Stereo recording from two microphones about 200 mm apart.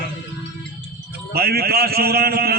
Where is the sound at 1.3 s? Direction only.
50° right (ahead or behind).